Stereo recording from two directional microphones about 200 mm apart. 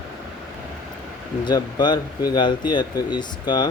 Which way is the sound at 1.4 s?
20° left (ahead or behind).